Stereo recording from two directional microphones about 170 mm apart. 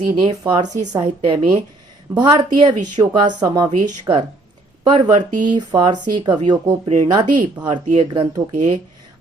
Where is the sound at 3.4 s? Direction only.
25° right (ahead or behind).